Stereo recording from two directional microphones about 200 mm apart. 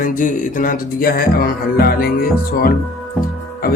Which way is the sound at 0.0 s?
40° left (ahead or behind).